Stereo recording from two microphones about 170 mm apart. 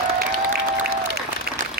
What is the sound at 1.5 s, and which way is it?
Applause, 60° right (ahead or behind).